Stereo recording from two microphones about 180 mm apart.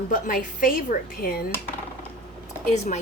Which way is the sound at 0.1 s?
50° left (ahead or behind).